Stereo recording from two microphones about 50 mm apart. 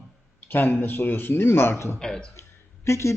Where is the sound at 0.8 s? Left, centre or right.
Left.